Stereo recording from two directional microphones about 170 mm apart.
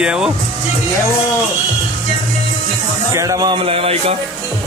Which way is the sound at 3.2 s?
20° right (ahead or behind).